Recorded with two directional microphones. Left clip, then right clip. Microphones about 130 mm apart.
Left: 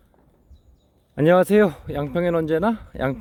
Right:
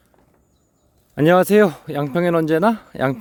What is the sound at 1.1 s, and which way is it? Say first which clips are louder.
Speech: right 2 dB; 30° right (ahead or behind).